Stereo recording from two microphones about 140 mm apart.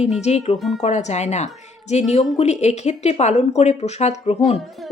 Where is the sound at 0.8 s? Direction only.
55° left (ahead or behind).